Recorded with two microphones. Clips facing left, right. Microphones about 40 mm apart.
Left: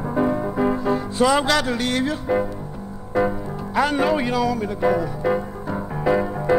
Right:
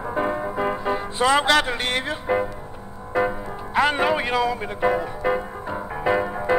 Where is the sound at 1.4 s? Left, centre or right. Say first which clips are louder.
Right 1 dB; right.